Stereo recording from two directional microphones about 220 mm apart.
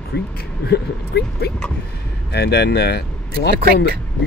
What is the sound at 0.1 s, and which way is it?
Speech, 45° left (ahead or behind).